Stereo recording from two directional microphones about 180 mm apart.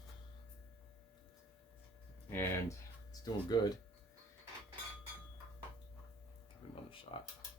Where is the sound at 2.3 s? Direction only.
15° left (ahead or behind).